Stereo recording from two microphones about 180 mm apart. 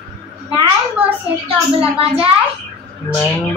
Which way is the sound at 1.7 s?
30° right (ahead or behind).